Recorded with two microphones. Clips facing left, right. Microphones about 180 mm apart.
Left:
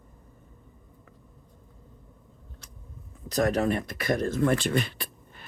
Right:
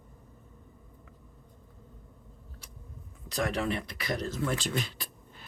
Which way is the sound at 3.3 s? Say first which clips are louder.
Left 6 dB; 45° left (ahead or behind).